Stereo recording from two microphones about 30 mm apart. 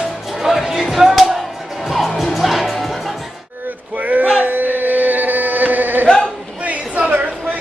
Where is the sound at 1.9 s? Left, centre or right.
Centre.